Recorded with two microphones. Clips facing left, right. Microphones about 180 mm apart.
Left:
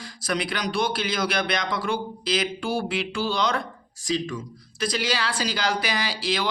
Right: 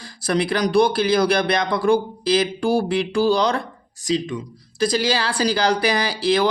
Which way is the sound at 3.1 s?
35° right (ahead or behind).